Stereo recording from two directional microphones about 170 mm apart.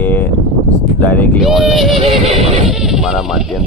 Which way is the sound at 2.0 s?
35° right (ahead or behind).